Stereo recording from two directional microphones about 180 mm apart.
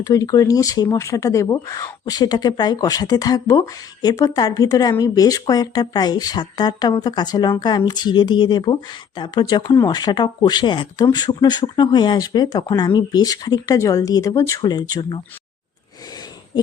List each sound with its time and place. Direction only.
0.0 s speech: 20° left (ahead or behind)